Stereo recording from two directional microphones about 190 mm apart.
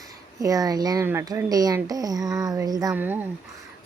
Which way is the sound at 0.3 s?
20° right (ahead or behind).